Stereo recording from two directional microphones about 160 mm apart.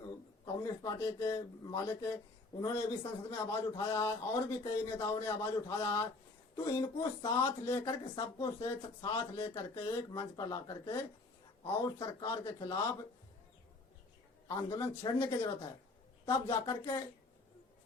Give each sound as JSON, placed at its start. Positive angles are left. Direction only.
{"t": 0.8, "sound": "a man's voice", "side_deg": 20}
{"t": 14.4, "sound": "a man's voice", "side_deg": 20}